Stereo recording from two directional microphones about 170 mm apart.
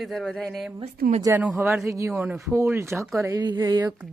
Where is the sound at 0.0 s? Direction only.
Centre (ahead or behind).